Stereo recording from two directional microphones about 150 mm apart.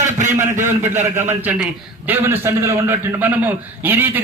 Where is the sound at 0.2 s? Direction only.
55° right (ahead or behind).